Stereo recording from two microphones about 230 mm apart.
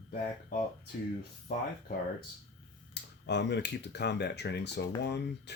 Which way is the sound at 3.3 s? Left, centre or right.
Left.